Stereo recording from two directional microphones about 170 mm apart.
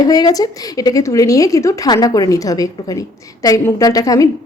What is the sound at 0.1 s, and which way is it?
A woman's voice, 20° left (ahead or behind).